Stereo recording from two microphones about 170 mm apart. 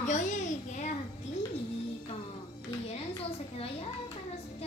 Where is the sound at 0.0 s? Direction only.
45° left (ahead or behind).